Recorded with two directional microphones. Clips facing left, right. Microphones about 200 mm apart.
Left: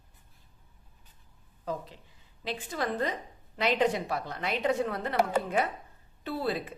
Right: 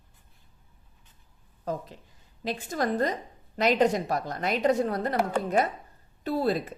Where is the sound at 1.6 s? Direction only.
45° right (ahead or behind).